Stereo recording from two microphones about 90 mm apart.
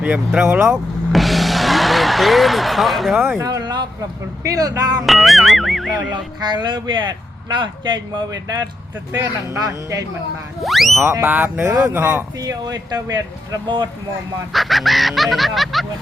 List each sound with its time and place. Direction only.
0.3 s speech: 10° right (ahead or behind)
0.7 s vehicle: centre (ahead or behind)
3.2 s speech: 25° right (ahead or behind)
3.4 s a sound: 45° right (ahead or behind)
4.4 s speech: 40° right (ahead or behind)
5.0 s music: centre (ahead or behind)
6.4 s speech: 55° right (ahead or behind); by 10.1 s 40° right (ahead or behind)
10.6 s music: centre (ahead or behind)
11.2 s speech: 20° right (ahead or behind)
12.4 s speech: 45° right (ahead or behind)
14.5 s music: centre (ahead or behind)